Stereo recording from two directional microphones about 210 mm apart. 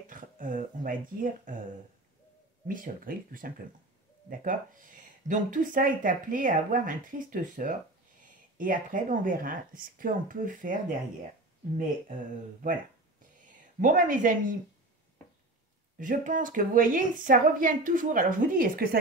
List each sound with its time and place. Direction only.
0.1 s speech: 40° right (ahead or behind)
2.7 s speech: 40° right (ahead or behind)
13.7 s speech: 40° right (ahead or behind)
16.0 s speech: 40° right (ahead or behind)